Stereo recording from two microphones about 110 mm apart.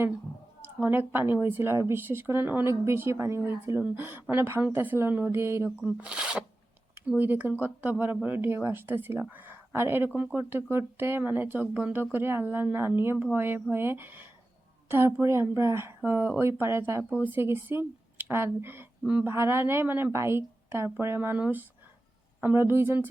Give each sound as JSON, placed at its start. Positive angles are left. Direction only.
{"t": 0.8, "sound": "speech", "side_deg": -20}
{"t": 5.8, "sound": "speech", "side_deg": -10}